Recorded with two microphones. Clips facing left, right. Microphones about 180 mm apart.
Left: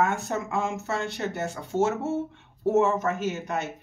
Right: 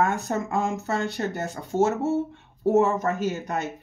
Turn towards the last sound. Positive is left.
turn(degrees=-40)  # may be behind; listen again after turning